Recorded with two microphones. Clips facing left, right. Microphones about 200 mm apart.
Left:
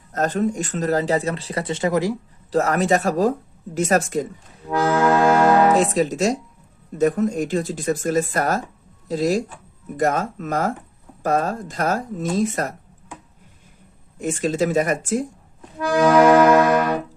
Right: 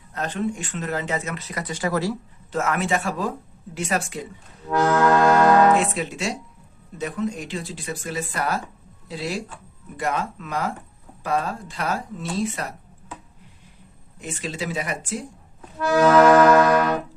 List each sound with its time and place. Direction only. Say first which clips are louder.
0.1 s speech: left 5 dB; 45° left (ahead or behind); by 2.1 s 20° left (ahead or behind)
2.5 s speech: left 5 dB; 35° left (ahead or behind)
4.9 s music: left 1 dB; 10° left (ahead or behind)
5.7 s speech: left 5 dB; 40° left (ahead or behind)
14.2 s speech: left 10 dB; 45° left (ahead or behind)
16.0 s music: left 1 dB; 10° left (ahead or behind)